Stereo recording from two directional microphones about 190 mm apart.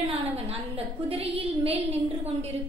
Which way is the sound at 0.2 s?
30° right (ahead or behind).